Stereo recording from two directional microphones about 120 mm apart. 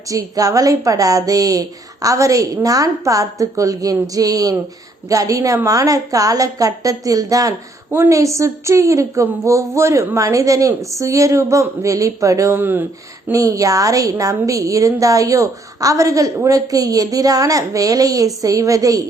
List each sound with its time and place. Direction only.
0.1 s a woman's voice: 30° right (ahead or behind)
12.5 s speech: 15° right (ahead or behind)
13.3 s a woman's voice: 30° right (ahead or behind)